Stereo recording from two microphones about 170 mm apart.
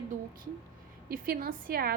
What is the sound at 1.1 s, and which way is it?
Speech, 60° right (ahead or behind).